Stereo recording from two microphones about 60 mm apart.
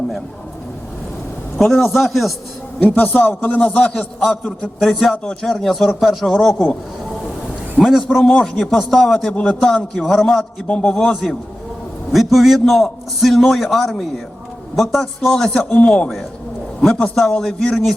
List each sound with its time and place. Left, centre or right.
1.5 s a man's voice: centre
2.8 s speech: left
3.9 s a man's voice: centre
7.8 s a sound: centre
8.0 s a man's voice: centre
9.2 s a man's voice: centre
10.7 s a man's voice: centre
12.1 s a man's voice: centre
17.2 s a man's voice: centre